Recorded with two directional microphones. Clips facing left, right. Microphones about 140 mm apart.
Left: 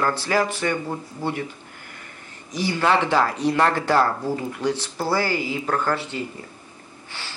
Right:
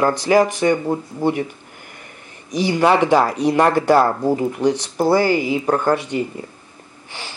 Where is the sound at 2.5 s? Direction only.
15° right (ahead or behind).